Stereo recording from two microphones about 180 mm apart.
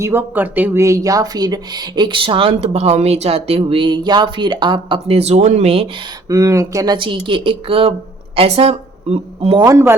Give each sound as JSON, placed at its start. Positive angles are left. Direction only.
{"t": 0.0, "sound": "speech", "side_deg": -10}
{"t": 6.2, "sound": "a woman's voice", "side_deg": -20}
{"t": 9.6, "sound": "speech", "side_deg": -15}